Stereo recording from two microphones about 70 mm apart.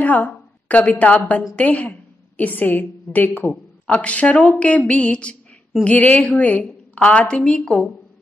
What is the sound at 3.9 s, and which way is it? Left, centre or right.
A woman's voice, centre.